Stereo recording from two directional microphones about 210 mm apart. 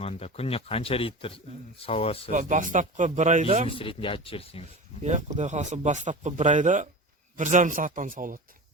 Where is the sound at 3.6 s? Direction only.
25° left (ahead or behind).